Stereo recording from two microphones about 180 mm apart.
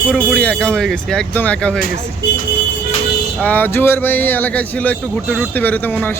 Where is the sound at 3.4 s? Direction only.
10° left (ahead or behind).